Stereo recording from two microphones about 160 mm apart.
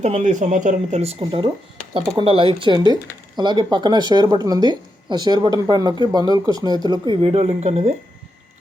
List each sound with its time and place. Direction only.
0.0 s speech: 50° right (ahead or behind)